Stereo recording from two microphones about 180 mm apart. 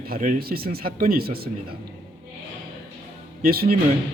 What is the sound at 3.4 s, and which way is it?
Speech, 55° right (ahead or behind).